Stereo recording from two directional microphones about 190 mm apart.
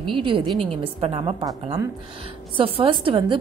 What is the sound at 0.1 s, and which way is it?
A woman's voice, 25° right (ahead or behind).